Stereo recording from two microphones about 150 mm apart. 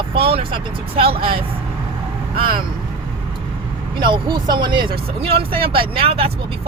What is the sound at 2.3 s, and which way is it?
Speech, 80° right.